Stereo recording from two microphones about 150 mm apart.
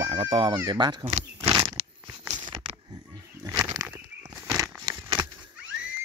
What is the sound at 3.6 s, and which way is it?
Bird flight, 25° right (ahead or behind).